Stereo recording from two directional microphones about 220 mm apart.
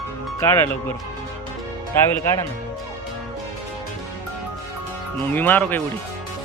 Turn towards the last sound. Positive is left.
turn(degrees=10)  # may be behind; listen again after turning